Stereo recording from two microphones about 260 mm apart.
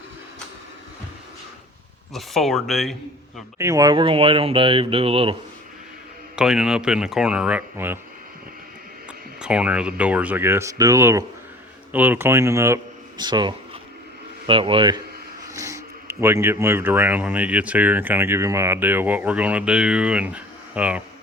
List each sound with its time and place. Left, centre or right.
2.1 s speech: centre
3.6 s speech: centre
6.3 s speech: centre
9.4 s speech: centre